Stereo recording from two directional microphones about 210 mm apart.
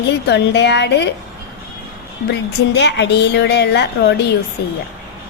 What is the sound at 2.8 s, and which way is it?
A woman's voice, 55° left (ahead or behind).